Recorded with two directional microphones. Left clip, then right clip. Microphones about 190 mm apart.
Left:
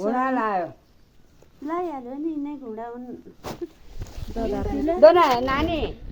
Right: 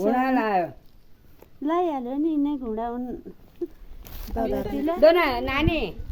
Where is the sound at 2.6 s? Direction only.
30° right (ahead or behind).